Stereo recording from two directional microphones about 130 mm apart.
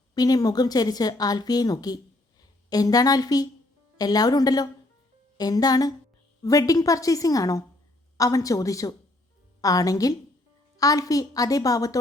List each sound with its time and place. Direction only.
0.1 s a woman's voice: 30° left (ahead or behind)